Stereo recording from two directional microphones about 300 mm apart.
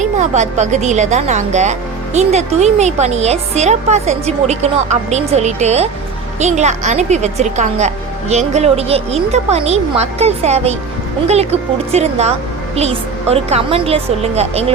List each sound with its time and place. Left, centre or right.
0.0 s a woman's voice: right